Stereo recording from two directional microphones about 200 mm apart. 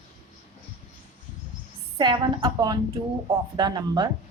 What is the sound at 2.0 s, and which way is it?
A woman's voice, 25° right (ahead or behind).